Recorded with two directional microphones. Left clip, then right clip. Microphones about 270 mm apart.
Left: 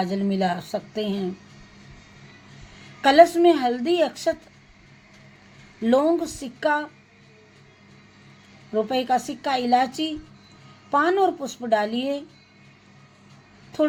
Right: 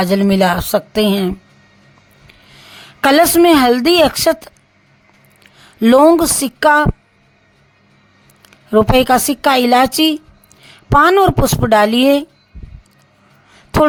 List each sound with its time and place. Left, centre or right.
0.0 s speech: right
3.0 s a woman's voice: right
5.8 s a woman's voice: right
8.7 s a woman's voice: right